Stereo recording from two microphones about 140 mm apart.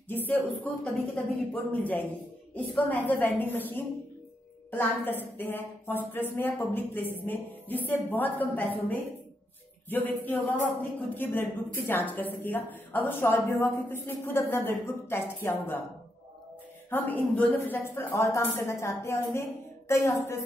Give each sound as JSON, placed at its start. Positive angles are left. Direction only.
{"t": 0.8, "sound": "a woman's voice", "side_deg": 10}
{"t": 16.9, "sound": "a woman's voice", "side_deg": 10}